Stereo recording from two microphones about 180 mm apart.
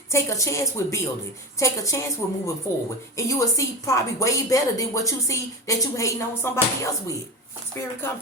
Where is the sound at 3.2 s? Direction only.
20° left (ahead or behind).